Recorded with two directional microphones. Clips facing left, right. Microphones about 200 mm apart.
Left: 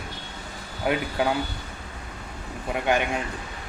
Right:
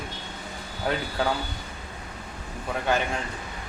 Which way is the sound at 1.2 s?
15° left (ahead or behind).